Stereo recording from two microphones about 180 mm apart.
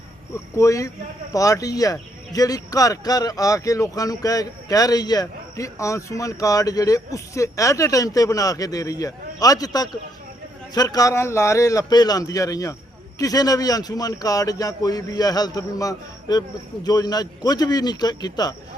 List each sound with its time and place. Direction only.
0.5 s speech: 15° left (ahead or behind)